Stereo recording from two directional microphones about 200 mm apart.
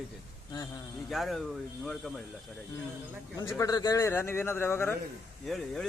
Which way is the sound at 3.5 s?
15° left (ahead or behind).